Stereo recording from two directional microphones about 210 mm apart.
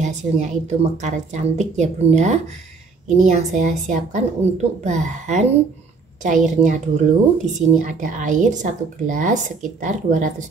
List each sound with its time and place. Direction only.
0.0 s a woman's voice: 35° right (ahead or behind)